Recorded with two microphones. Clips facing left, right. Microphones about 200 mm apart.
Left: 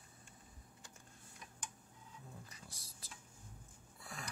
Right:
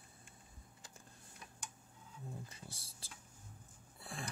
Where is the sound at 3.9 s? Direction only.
25° right (ahead or behind).